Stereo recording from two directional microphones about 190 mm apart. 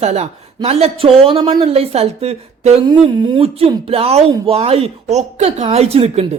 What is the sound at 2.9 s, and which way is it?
A woman's voice, 25° right (ahead or behind).